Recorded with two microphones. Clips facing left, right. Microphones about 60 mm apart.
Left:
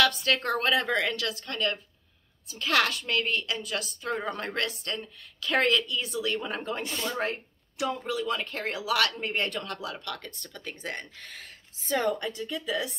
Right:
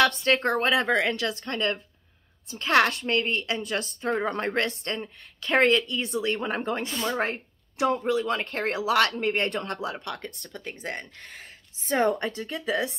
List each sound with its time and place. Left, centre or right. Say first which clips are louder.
0.0 s speech: right 3 dB; right
11.9 s speech: right 4 dB; right